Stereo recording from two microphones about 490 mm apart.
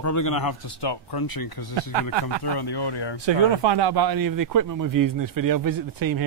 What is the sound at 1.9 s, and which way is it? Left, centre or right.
Speech, right.